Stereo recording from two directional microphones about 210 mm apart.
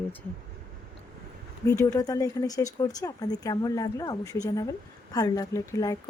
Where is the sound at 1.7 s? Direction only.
15° left (ahead or behind).